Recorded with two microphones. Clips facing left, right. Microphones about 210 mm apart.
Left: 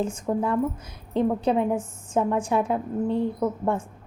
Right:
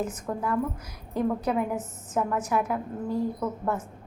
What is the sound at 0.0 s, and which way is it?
A woman's voice, 25° left (ahead or behind).